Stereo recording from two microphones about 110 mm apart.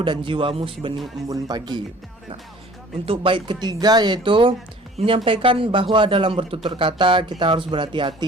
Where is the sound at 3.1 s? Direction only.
50° right (ahead or behind).